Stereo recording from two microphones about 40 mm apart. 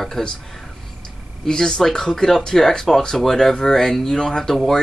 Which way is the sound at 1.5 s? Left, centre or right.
Centre.